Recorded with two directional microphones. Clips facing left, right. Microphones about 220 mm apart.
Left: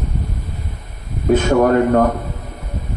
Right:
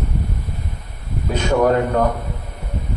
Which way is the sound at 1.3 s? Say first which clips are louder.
Left 3 dB; 50° left (ahead or behind).